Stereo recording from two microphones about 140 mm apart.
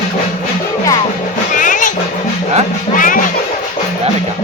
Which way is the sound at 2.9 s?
75° left (ahead or behind).